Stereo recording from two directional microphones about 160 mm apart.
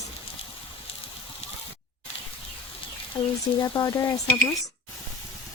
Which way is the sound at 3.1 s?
25° left (ahead or behind).